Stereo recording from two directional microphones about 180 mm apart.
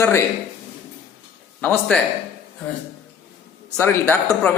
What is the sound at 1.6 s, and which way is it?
Speech, 5° left (ahead or behind).